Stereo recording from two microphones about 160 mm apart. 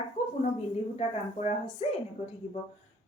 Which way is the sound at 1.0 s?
40° left (ahead or behind).